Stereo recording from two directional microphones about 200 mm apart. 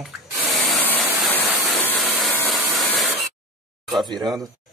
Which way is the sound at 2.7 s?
Centre (ahead or behind).